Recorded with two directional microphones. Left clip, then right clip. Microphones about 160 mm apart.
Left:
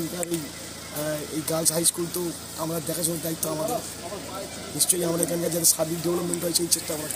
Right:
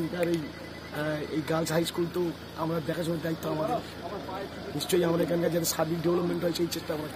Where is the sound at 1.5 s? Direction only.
5° right (ahead or behind).